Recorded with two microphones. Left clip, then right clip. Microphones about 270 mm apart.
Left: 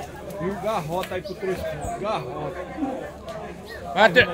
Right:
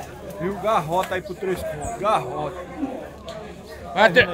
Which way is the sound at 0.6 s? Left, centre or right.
Right.